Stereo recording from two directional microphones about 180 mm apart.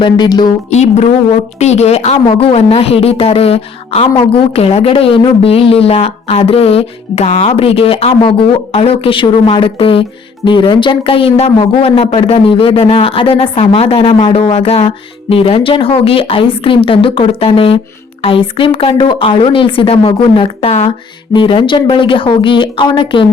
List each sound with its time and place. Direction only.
0.0 s a woman's voice: 25° left (ahead or behind)
0.7 s a woman's voice: 40° left (ahead or behind)